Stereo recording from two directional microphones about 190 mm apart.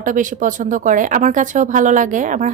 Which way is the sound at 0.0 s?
45° right (ahead or behind).